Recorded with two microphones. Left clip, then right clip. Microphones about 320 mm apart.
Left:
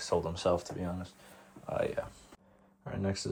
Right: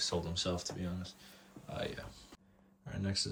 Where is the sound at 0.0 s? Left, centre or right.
Centre.